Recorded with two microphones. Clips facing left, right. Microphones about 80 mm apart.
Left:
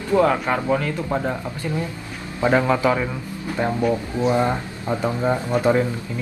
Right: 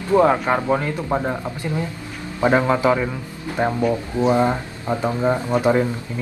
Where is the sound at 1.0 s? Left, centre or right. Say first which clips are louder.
Right 2 dB; centre.